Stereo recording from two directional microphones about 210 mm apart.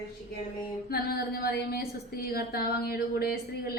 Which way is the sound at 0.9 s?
45° left (ahead or behind).